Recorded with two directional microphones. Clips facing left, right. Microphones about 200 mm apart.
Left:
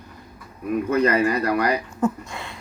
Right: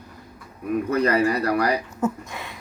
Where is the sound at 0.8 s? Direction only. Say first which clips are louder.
Left 1 dB; 35° right (ahead or behind).